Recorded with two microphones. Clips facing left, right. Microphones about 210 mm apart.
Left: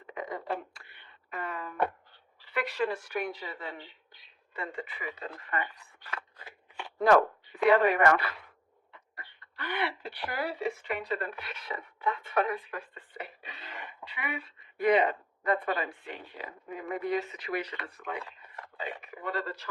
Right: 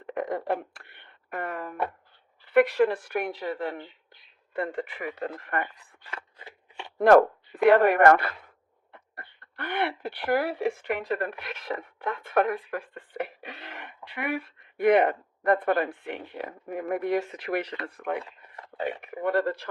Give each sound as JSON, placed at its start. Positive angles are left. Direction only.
{"t": 0.1, "sound": "speech", "side_deg": -55}
{"t": 6.0, "sound": "scissors", "side_deg": -25}
{"t": 7.6, "sound": "speech", "side_deg": -55}